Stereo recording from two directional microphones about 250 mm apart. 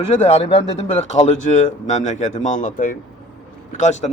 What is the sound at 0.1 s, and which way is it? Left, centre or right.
Speech, left.